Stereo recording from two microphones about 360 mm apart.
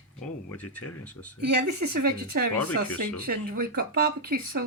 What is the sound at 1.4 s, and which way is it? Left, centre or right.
Speech, right.